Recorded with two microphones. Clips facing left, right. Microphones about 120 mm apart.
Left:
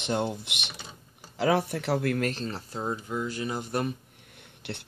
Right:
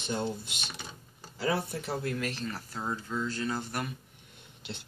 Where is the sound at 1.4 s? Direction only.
90° left.